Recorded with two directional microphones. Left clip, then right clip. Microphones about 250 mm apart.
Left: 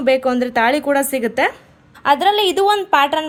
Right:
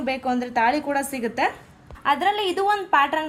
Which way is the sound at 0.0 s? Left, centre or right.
Left.